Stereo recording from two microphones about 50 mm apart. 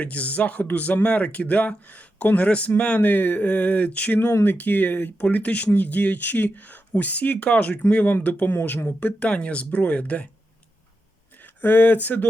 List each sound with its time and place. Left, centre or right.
0.0 s speech: left
11.4 s speech: left